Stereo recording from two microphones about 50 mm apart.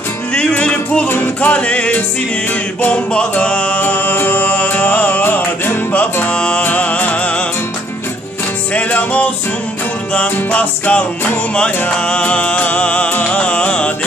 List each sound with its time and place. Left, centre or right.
0.3 s music: left
1.0 s music: left
1.5 s music: left
3.1 s music: left
6.2 s music: left
8.7 s music: left